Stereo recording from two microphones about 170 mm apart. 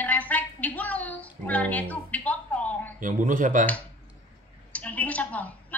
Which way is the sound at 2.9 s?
50° right (ahead or behind).